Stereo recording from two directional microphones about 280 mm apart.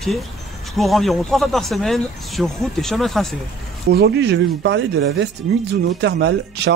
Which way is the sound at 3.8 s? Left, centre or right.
Right.